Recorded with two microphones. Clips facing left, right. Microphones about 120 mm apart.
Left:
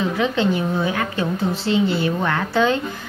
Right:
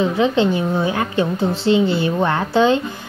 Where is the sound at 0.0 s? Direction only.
30° right (ahead or behind).